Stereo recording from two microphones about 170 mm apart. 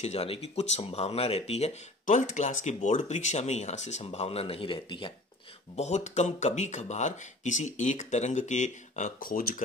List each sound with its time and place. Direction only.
0.0 s speech: 40° left (ahead or behind)
5.8 s speech: 45° left (ahead or behind)